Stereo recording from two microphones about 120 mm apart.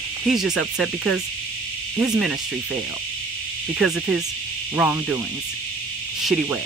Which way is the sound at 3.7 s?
10° right (ahead or behind).